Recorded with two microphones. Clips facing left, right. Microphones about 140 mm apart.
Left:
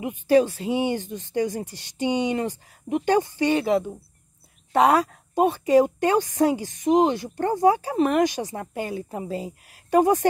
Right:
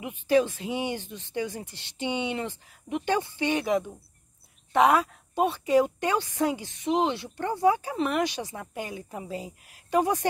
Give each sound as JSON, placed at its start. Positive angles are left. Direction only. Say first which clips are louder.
{"t": 0.3, "sound": "speech", "louder": "left 4 dB", "side_deg": 40}
{"t": 4.7, "sound": "a woman's voice", "louder": "left 3 dB", "side_deg": 35}